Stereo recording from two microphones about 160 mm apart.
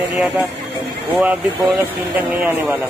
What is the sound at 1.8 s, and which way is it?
Speech, 10° right (ahead or behind).